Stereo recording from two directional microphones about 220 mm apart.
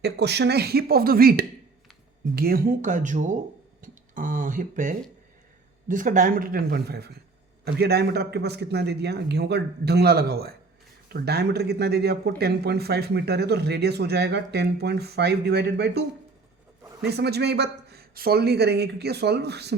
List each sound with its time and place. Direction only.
0.0 s speech: 50° right (ahead or behind)
17.1 s speech: 50° right (ahead or behind)